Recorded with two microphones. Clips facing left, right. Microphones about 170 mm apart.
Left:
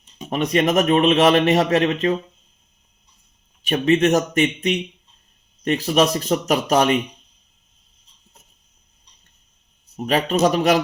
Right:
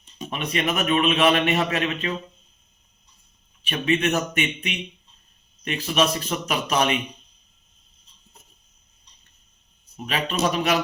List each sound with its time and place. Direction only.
0.3 s a man's voice: 40° left (ahead or behind)
3.7 s a man's voice: 40° left (ahead or behind)
10.1 s a man's voice: 40° left (ahead or behind)